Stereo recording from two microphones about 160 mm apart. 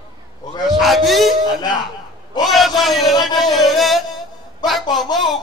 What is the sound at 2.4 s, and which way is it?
A man's voice, centre (ahead or behind).